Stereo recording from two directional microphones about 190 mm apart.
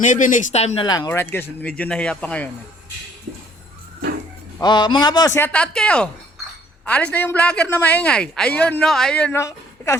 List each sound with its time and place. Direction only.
0.0 s speech: 40° left (ahead or behind)
0.9 s a man's voice: 15° left (ahead or behind)
4.5 s a man's voice: 20° left (ahead or behind)